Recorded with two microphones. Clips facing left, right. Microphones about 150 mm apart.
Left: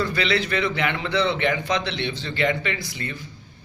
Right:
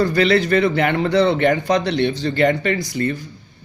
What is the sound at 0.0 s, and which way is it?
A man's voice, 45° right (ahead or behind).